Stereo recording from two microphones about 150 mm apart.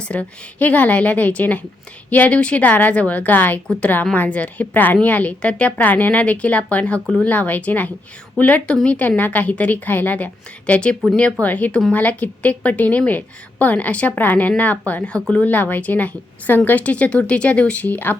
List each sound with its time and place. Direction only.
0.0 s a woman's voice: 10° left (ahead or behind)